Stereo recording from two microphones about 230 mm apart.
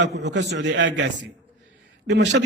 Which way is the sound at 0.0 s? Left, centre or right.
Right.